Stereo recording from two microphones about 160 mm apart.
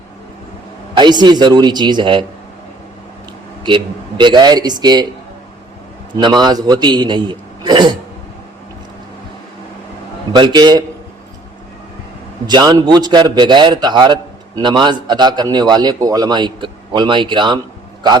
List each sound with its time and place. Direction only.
0.9 s a man's voice: 25° right (ahead or behind)
3.6 s a man's voice: 30° right (ahead or behind)
6.1 s a man's voice: 25° right (ahead or behind)
10.3 s a man's voice: 30° right (ahead or behind)
12.5 s a man's voice: 25° right (ahead or behind)